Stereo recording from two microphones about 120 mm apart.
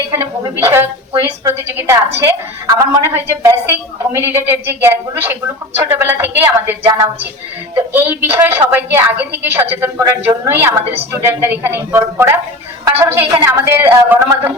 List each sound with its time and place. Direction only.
0.1 s a woman's voice: 20° right (ahead or behind)